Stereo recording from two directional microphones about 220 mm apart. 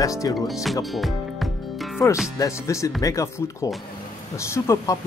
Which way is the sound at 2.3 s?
15° left (ahead or behind).